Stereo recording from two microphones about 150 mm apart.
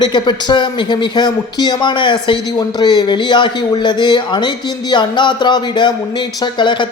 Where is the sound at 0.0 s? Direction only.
30° left (ahead or behind).